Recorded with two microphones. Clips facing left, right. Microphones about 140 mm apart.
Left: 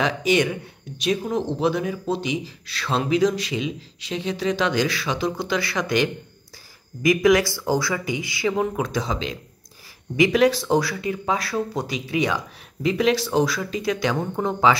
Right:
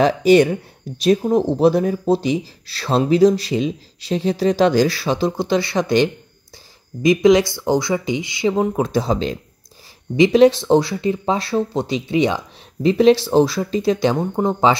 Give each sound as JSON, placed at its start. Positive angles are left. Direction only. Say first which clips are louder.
{"t": 0.0, "sound": "speech", "louder": "right 8 dB", "side_deg": -35}
{"t": 10.1, "sound": "speech", "louder": "right 6 dB", "side_deg": -25}